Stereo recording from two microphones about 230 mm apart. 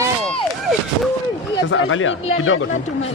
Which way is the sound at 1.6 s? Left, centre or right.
Left.